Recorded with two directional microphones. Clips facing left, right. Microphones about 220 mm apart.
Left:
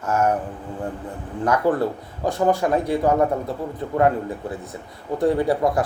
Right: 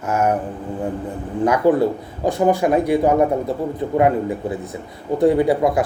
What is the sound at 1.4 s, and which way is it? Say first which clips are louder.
Speech: right 4 dB; 15° right (ahead or behind).